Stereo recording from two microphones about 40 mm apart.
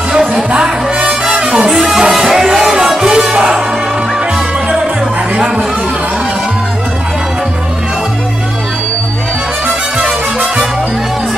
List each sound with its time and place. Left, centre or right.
0.5 s music: right
1.7 s music: centre
9.9 s music: right